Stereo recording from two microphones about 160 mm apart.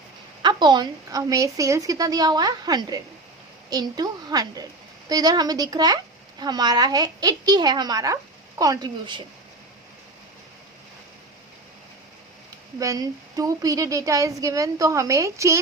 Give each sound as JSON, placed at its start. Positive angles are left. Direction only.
{"t": 0.4, "sound": "a child's voice", "side_deg": -25}
{"t": 12.8, "sound": "a child's voice", "side_deg": -20}